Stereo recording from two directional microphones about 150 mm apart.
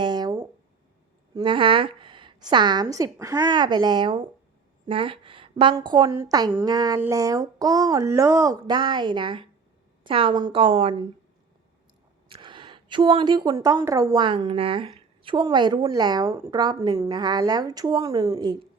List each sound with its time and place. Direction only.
0.0 s a sound: 30° right (ahead or behind)
1.4 s a woman's voice: 35° right (ahead or behind)
12.3 s a woman's voice: 35° right (ahead or behind)